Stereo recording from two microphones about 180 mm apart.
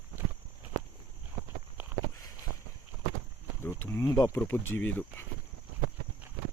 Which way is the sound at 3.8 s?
15° left (ahead or behind).